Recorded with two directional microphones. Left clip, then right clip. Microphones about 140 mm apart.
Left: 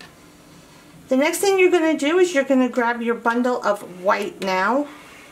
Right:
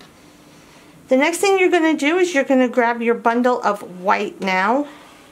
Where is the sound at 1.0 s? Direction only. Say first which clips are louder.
Right 3 dB; 20° right (ahead or behind).